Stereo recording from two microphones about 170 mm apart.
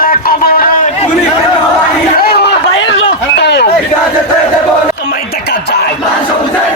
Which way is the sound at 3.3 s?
85° left.